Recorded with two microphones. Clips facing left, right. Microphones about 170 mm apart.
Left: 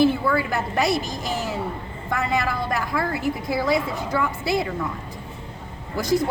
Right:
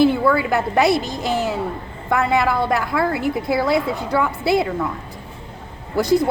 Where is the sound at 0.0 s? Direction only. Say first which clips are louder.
Right 4 dB; 65° right (ahead or behind).